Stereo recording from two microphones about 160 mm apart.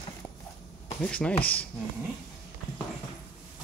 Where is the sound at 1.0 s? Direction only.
5° left (ahead or behind).